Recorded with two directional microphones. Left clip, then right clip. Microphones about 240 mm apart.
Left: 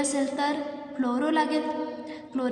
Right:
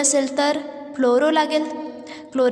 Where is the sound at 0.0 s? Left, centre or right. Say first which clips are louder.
Right 8 dB; right.